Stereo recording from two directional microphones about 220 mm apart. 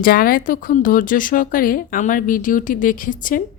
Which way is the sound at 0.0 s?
40° left (ahead or behind).